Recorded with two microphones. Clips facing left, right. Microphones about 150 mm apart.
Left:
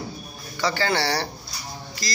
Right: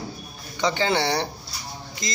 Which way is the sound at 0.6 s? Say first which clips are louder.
Right 1 dB; 20° right (ahead or behind).